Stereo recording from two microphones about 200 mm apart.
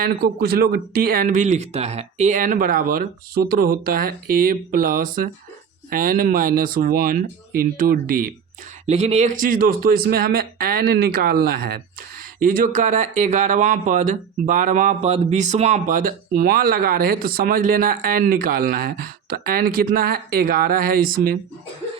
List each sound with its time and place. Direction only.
0.0 s speech: 50° right (ahead or behind)
8.9 s speech: 30° right (ahead or behind)